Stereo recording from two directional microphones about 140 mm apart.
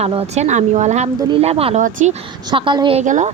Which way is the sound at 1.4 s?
45° right (ahead or behind).